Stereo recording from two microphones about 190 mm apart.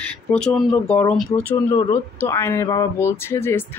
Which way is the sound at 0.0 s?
5° left (ahead or behind).